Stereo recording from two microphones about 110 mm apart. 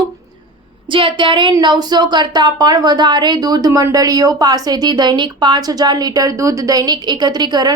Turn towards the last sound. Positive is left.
turn(degrees=-40)  # may be behind; listen again after turning